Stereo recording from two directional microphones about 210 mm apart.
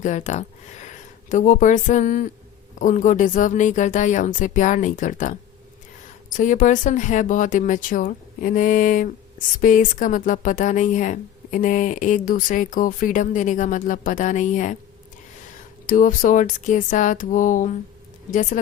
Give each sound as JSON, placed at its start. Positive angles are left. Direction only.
{"t": 0.0, "sound": "speech", "side_deg": 35}
{"t": 15.9, "sound": "speech", "side_deg": 40}